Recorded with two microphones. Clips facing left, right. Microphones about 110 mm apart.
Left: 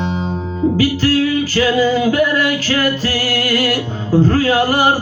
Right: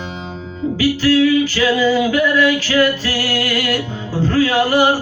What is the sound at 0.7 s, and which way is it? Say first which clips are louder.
Music: right 3 dB; 40° left (ahead or behind).